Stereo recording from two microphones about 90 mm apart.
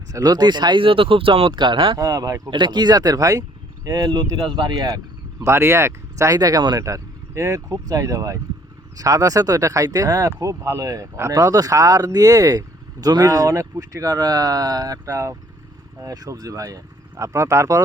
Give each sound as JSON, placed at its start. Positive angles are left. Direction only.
{"t": 0.1, "sound": "speech", "side_deg": -45}
{"t": 2.0, "sound": "speech", "side_deg": -40}
{"t": 2.5, "sound": "speech", "side_deg": -55}
{"t": 4.7, "sound": "speech", "side_deg": -40}
{"t": 5.4, "sound": "speech", "side_deg": -30}
{"t": 6.8, "sound": "speech", "side_deg": -35}